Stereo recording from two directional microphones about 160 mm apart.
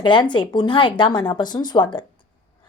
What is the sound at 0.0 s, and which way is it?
A woman's voice, 30° left (ahead or behind).